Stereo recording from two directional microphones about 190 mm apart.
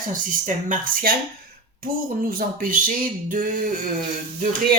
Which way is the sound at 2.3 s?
45° right (ahead or behind).